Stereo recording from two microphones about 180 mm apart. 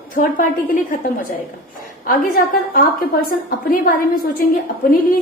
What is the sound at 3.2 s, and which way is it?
Speech, 55° left (ahead or behind).